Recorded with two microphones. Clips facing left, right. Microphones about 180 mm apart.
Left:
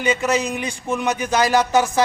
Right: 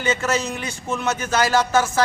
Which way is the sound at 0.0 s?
15° left (ahead or behind).